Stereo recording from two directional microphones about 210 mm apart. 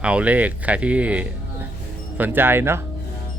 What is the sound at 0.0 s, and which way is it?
Speech, 5° right (ahead or behind).